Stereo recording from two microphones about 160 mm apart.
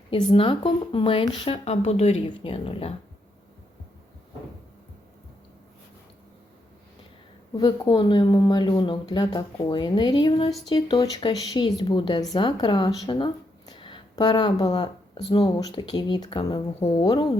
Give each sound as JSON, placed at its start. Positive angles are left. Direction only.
{"t": 0.1, "sound": "a woman's voice", "side_deg": 30}
{"t": 7.5, "sound": "a woman's voice", "side_deg": 30}